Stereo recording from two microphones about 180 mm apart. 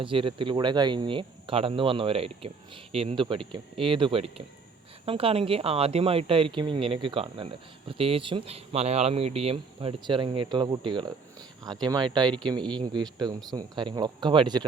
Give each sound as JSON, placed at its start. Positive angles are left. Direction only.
{"t": 0.0, "sound": "speech", "side_deg": -30}